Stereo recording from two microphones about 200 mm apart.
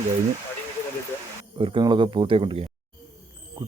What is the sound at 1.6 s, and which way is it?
Speech, 25° right (ahead or behind).